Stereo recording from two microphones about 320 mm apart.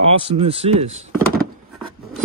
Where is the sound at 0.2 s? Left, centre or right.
Centre.